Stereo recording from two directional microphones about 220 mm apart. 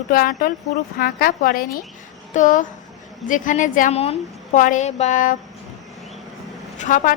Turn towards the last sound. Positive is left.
turn(degrees=35)  # may be behind; listen again after turning